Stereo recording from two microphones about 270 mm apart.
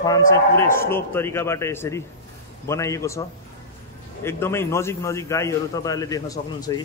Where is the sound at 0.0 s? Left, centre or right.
Centre.